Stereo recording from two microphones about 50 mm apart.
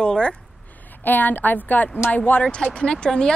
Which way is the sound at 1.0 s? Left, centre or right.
Left.